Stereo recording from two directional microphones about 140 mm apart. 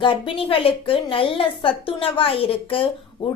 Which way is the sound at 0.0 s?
40° left (ahead or behind).